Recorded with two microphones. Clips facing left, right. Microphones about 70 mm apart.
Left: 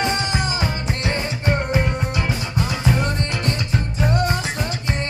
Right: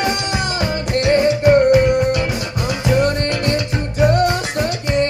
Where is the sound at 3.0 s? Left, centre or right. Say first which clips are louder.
Right 6 dB; right.